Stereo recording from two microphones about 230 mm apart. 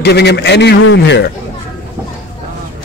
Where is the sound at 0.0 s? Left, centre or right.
Left.